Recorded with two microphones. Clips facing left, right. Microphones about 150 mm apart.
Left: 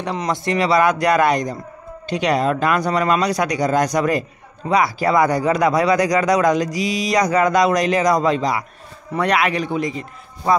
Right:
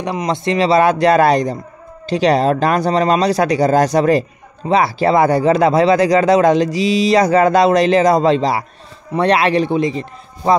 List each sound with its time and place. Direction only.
0.0 s speech: 15° right (ahead or behind)